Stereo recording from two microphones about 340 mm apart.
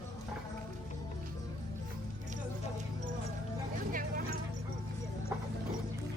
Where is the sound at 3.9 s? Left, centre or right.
Right.